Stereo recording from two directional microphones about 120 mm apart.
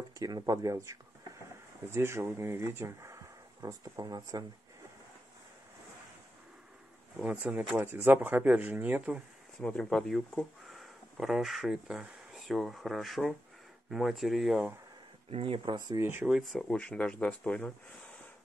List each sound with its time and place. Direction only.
0.2 s speech: 30° right (ahead or behind)
2.0 s speech: 20° right (ahead or behind)
7.2 s speech: 10° right (ahead or behind)
9.6 s speech: 5° left (ahead or behind)
15.2 s speech: 50° right (ahead or behind)
16.0 s speech: 20° right (ahead or behind)
16.3 s speech: centre (ahead or behind)